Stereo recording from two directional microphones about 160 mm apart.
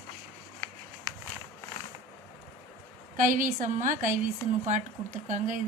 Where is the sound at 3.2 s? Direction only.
55° right (ahead or behind).